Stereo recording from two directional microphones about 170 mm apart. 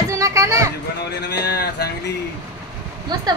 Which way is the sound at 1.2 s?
75° left (ahead or behind).